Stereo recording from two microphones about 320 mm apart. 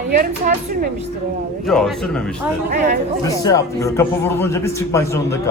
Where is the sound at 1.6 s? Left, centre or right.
Centre.